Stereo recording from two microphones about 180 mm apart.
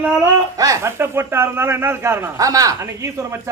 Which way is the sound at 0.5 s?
15° right (ahead or behind).